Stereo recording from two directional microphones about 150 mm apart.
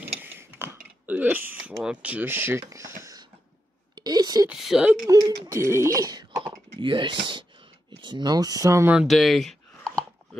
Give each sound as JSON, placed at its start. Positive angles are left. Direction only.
{"t": 0.0, "sound": "mechanisms", "side_deg": -15}
{"t": 1.8, "sound": "speech", "side_deg": -5}
{"t": 3.9, "sound": "a sound", "side_deg": -30}
{"t": 4.5, "sound": "speech", "side_deg": -5}
{"t": 5.0, "sound": "speech", "side_deg": -25}
{"t": 8.9, "sound": "a sound", "side_deg": 0}